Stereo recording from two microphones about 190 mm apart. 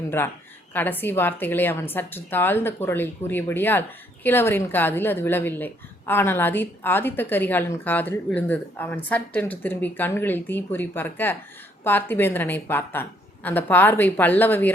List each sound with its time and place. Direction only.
0.7 s a woman's voice: 10° left (ahead or behind)